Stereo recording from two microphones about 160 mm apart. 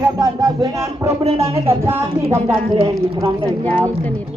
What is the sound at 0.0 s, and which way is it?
Speech, 20° right (ahead or behind).